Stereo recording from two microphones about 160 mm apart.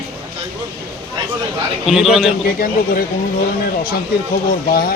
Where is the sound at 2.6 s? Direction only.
65° left (ahead or behind).